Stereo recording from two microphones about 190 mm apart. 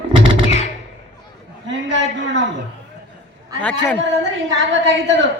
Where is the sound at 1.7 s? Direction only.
75° right (ahead or behind).